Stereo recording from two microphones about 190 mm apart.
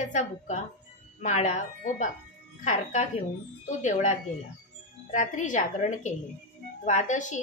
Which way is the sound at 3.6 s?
40° left (ahead or behind).